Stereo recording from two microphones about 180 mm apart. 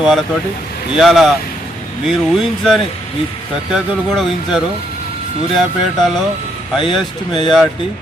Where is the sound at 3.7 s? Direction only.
Centre (ahead or behind).